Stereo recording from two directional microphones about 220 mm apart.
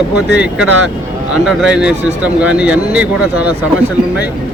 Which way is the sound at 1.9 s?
30° right (ahead or behind).